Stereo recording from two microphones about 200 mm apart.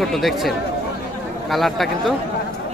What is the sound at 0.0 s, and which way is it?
Speech, centre (ahead or behind).